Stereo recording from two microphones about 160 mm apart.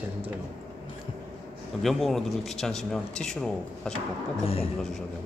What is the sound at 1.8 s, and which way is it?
Speech, centre (ahead or behind).